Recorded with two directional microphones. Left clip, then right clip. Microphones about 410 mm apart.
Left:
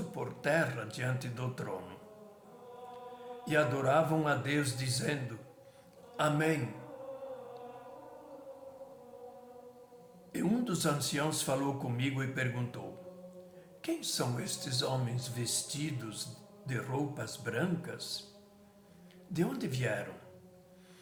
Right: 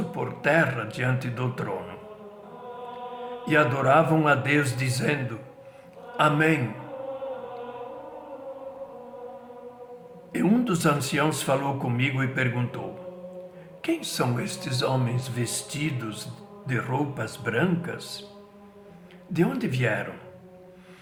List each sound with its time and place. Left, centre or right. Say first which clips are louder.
0.1 s speech: right 9 dB; left
3.4 s a man's voice: right 8 dB; left
10.3 s a man's voice: right 10 dB; left
13.8 s a man's voice: right 9 dB; left
19.3 s a man's voice: right 9 dB; left